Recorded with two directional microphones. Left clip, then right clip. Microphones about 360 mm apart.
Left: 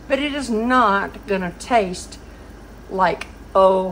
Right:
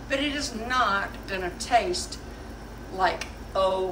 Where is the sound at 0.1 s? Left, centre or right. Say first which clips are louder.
Left 7 dB; centre.